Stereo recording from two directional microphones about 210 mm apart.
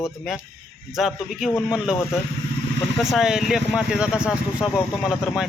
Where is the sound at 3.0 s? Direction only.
Centre (ahead or behind).